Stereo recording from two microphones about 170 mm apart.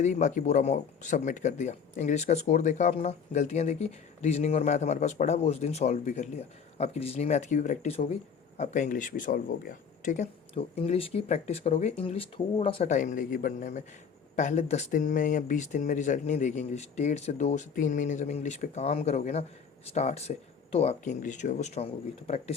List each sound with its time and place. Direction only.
0.0 s speech: 45° left (ahead or behind)
12.9 s speech: 45° left (ahead or behind)